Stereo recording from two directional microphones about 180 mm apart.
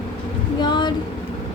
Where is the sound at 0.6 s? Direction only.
25° left (ahead or behind).